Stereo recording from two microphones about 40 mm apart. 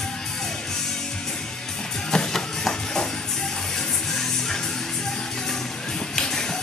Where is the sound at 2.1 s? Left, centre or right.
Centre.